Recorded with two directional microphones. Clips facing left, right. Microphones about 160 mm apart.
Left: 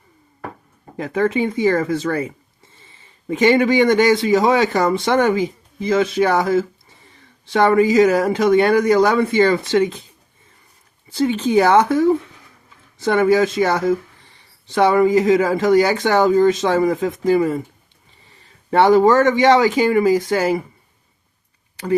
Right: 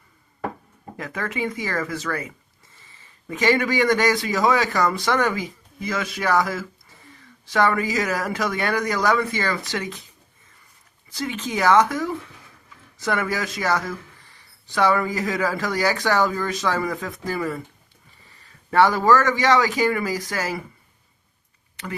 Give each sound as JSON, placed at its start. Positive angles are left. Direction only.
{"t": 0.9, "sound": "a man's voice", "side_deg": 30}
{"t": 11.1, "sound": "speech", "side_deg": 30}